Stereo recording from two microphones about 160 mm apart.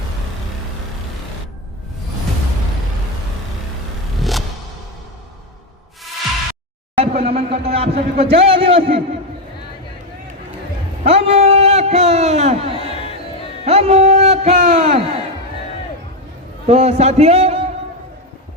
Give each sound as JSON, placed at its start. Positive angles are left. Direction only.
{"t": 4.2, "sound": "music", "side_deg": 0}
{"t": 6.9, "sound": "speech", "side_deg": -40}
{"t": 11.0, "sound": "a man's voice", "side_deg": -40}
{"t": 16.6, "sound": "speech", "side_deg": -40}